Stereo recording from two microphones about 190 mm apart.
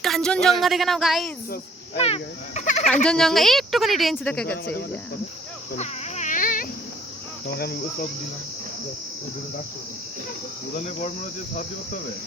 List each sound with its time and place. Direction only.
0.0 s a woman's voice: centre (ahead or behind)
2.0 s cricket: 30° left (ahead or behind)
2.8 s a woman's voice: 5° left (ahead or behind)
5.7 s a sound: 35° left (ahead or behind)
7.4 s insect: 55° left (ahead or behind)
10.8 s cricket: 40° left (ahead or behind)